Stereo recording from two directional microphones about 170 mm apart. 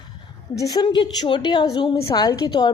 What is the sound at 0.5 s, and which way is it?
A woman's voice, 20° left (ahead or behind).